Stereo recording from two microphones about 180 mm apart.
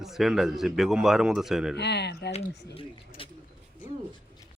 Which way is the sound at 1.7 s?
70° left (ahead or behind).